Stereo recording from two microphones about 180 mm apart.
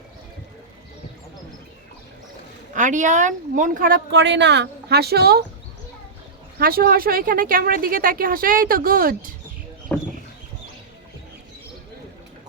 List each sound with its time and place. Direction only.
2.7 s speech: 45° right (ahead or behind); by 5.4 s 60° right (ahead or behind)
6.6 s speech: 55° right (ahead or behind)
9.9 s chicken: 10° left (ahead or behind)